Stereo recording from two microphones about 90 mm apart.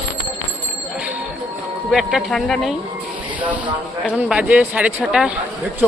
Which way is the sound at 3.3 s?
15° right (ahead or behind).